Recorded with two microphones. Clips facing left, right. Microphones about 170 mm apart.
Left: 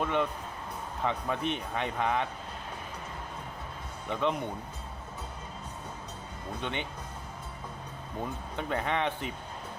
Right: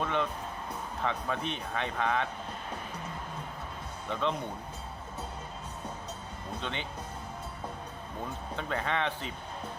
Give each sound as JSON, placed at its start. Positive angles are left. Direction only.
{"t": 0.0, "sound": "speech", "side_deg": 15}
{"t": 4.1, "sound": "speech", "side_deg": 15}
{"t": 6.6, "sound": "speech", "side_deg": 15}
{"t": 8.5, "sound": "speech", "side_deg": 15}